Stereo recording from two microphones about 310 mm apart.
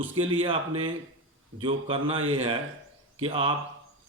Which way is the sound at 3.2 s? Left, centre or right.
Centre.